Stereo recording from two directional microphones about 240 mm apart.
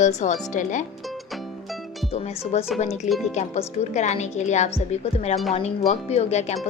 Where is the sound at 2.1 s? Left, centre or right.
Left.